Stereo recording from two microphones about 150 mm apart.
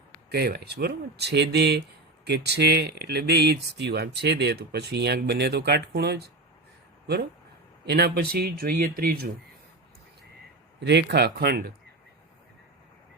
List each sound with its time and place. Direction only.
0.3 s speech: 90° right
7.9 s speech: 90° right
11.1 s speech: 90° right